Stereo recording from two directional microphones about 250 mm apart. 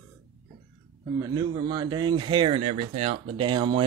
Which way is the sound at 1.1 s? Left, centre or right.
Centre.